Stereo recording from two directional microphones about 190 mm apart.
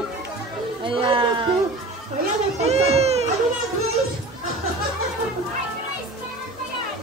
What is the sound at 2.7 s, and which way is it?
Speech, 35° right (ahead or behind).